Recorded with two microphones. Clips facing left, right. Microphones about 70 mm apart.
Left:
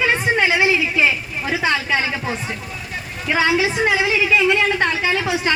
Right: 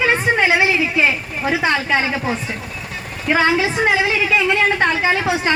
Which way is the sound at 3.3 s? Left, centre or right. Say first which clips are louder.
Right 2 dB; right.